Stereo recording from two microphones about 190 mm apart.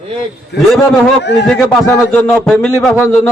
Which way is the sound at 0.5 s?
60° left (ahead or behind).